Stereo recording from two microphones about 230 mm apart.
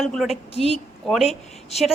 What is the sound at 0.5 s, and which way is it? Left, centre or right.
Speech, left.